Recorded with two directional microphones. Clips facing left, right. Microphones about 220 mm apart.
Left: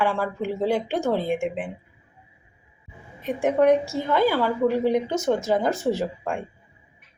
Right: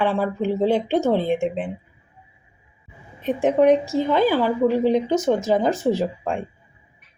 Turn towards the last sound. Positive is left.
turn(degrees=-15)  # may be behind; listen again after turning